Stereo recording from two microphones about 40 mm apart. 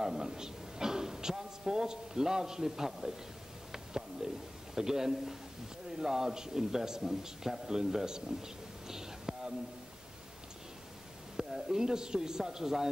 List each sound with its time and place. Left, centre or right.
0.0 s a man's voice: centre
3.7 s bird: centre
4.7 s a man's voice: centre
11.3 s a man's voice: centre